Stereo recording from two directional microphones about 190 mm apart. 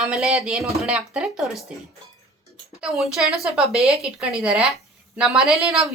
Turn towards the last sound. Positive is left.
turn(degrees=0)  # may be behind; listen again after turning